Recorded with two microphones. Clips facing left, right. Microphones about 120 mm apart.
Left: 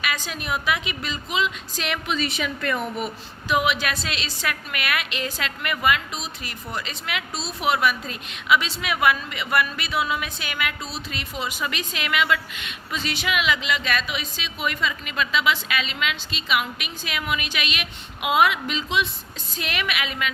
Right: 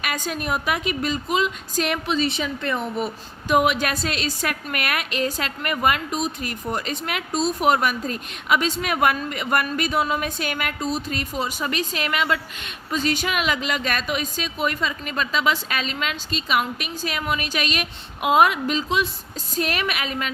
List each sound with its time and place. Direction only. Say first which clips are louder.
0.0 s a woman's voice: right 3 dB; 45° right (ahead or behind); by 3.1 s 30° right (ahead or behind)
3.5 s a woman's voice: right 3 dB; 45° right (ahead or behind)